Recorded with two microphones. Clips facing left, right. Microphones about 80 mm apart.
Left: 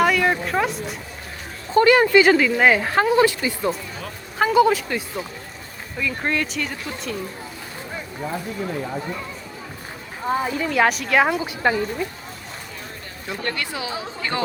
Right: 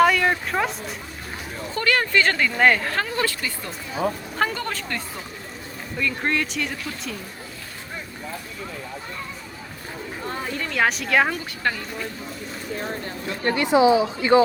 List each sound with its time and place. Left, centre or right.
0.0 s speech: centre
1.7 s speech: left
4.4 s speech: centre
10.2 s speech: centre
11.3 s speech: centre
13.4 s speech: right